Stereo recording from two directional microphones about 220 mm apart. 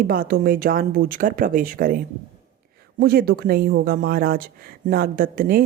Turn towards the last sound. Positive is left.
turn(degrees=-40)  # may be behind; listen again after turning